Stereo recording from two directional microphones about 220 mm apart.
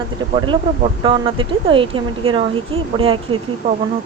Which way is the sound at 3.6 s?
40° right (ahead or behind).